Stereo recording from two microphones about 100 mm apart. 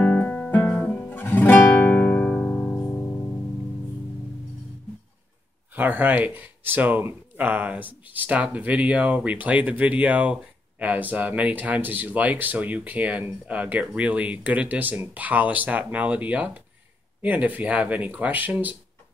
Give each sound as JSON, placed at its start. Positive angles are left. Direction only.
{"t": 0.0, "sound": "music", "side_deg": 15}
{"t": 5.8, "sound": "speech", "side_deg": -20}